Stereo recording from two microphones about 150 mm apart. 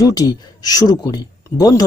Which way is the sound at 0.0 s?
25° left (ahead or behind).